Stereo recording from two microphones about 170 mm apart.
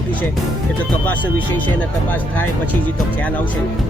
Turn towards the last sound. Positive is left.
turn(degrees=10)  # may be behind; listen again after turning